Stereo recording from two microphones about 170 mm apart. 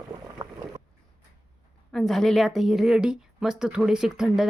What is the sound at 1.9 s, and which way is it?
A woman's voice, centre (ahead or behind).